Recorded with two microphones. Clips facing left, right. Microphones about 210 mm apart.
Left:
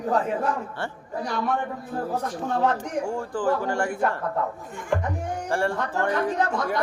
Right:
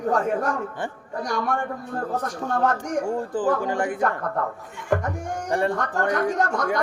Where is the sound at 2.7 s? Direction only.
45° right (ahead or behind).